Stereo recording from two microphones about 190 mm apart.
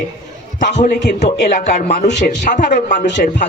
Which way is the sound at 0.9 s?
60° left (ahead or behind).